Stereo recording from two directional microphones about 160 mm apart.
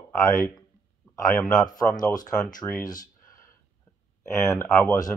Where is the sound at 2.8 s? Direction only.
25° left (ahead or behind).